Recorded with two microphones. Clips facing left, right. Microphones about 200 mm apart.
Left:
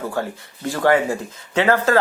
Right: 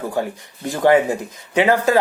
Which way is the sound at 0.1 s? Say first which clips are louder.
Right 2 dB; 15° right (ahead or behind).